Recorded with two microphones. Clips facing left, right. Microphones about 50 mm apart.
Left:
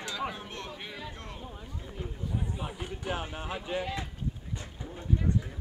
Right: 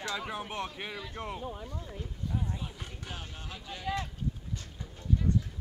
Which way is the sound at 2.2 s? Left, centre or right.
Centre.